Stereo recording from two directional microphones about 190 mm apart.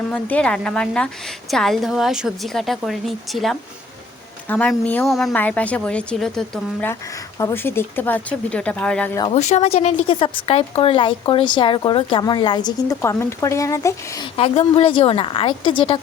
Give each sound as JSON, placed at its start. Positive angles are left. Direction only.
{"t": 0.1, "sound": "a woman's voice", "side_deg": 5}
{"t": 7.3, "sound": "a woman's voice", "side_deg": 15}
{"t": 9.3, "sound": "a woman's voice", "side_deg": 35}
{"t": 14.3, "sound": "a woman's voice", "side_deg": 30}